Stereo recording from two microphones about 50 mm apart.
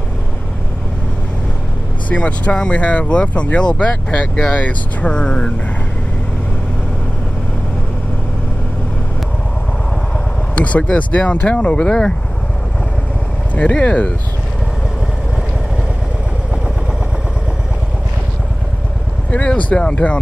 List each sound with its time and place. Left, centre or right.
2.0 s speech: left
10.5 s speech: left
13.6 s speech: left
19.3 s speech: left